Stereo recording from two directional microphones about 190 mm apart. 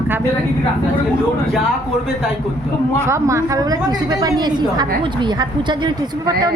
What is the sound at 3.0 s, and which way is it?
A woman's voice, 15° right (ahead or behind).